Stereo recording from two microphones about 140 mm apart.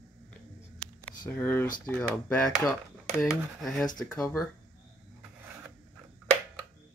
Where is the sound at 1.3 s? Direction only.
15° left (ahead or behind).